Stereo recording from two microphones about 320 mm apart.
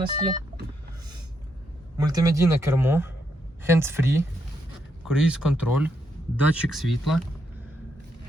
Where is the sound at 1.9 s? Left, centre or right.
Centre.